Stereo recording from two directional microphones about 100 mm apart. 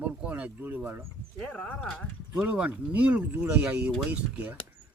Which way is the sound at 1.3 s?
10° left (ahead or behind).